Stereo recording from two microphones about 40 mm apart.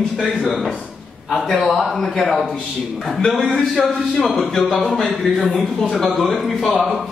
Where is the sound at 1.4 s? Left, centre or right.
Centre.